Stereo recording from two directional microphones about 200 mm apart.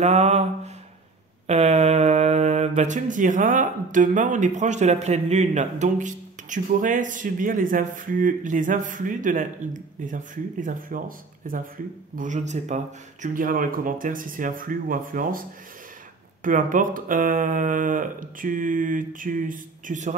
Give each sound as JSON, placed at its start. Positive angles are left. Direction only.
{"t": 0.0, "sound": "speech", "side_deg": -35}
{"t": 1.5, "sound": "speech", "side_deg": -35}
{"t": 16.4, "sound": "speech", "side_deg": -40}